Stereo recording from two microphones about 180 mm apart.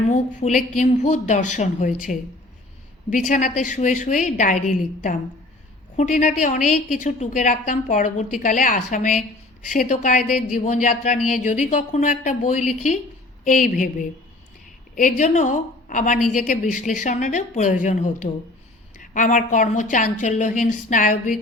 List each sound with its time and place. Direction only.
0.1 s speech: 45° left (ahead or behind)
6.0 s speech: 45° left (ahead or behind)